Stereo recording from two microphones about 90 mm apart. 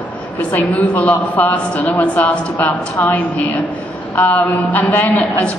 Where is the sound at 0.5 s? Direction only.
20° left (ahead or behind).